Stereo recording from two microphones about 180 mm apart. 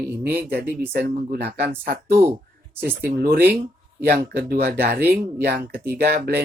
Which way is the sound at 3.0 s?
60° right (ahead or behind).